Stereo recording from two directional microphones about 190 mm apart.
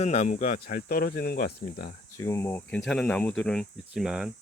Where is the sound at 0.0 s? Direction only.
35° left (ahead or behind); by 1.9 s 55° left (ahead or behind).